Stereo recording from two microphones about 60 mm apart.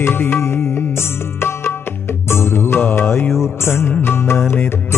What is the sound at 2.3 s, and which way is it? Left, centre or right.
Music, left.